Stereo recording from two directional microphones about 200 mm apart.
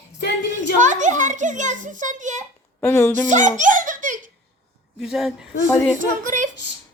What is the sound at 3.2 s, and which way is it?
Speech, 40° right (ahead or behind).